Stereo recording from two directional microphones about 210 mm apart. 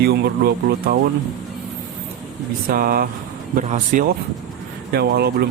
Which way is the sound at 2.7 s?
45° right (ahead or behind).